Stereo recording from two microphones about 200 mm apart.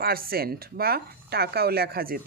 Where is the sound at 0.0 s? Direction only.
50° right (ahead or behind).